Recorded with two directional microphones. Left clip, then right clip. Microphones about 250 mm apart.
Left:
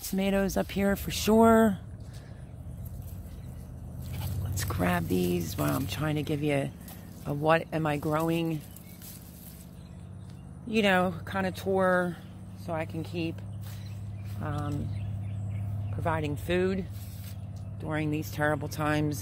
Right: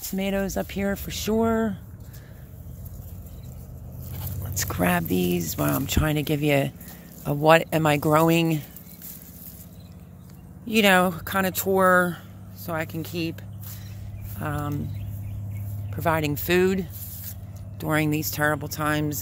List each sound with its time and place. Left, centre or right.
0.0 s speech: centre
4.1 s biting: centre
4.6 s speech: centre
10.7 s speech: right
14.4 s speech: right
15.9 s speech: right; by 19.1 s centre